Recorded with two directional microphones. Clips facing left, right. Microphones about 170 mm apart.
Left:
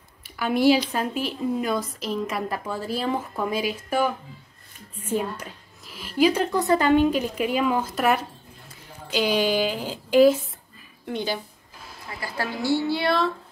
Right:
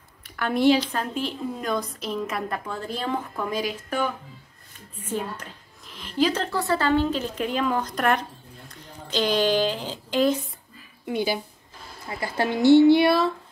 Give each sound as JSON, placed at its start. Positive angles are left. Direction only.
{"t": 0.2, "sound": "a woman's voice", "side_deg": 5}
{"t": 11.1, "sound": "a woman's voice", "side_deg": -10}
{"t": 12.1, "sound": "speech", "side_deg": -25}